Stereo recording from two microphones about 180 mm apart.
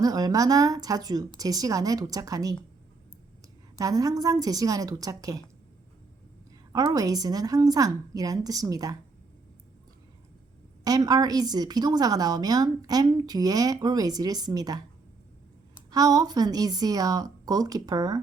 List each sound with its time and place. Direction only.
0.0 s a woman's voice: 20° right (ahead or behind)
3.8 s a woman's voice: 20° right (ahead or behind)
6.7 s a woman's voice: 20° right (ahead or behind)
10.8 s a woman's voice: 20° right (ahead or behind)
15.9 s a woman's voice: 20° right (ahead or behind)